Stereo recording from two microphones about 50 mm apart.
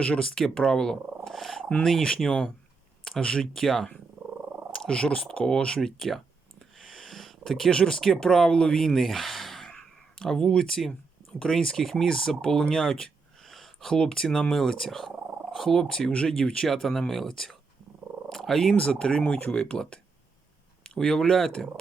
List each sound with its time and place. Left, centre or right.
0.0 s speech: centre
1.2 s purr: centre
1.8 s speech: centre
9.6 s speech: centre
16.6 s speech: centre
18.3 s purr: centre
18.9 s speech: centre